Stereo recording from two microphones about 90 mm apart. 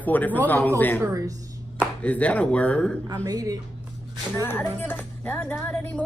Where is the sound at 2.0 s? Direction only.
15° left (ahead or behind).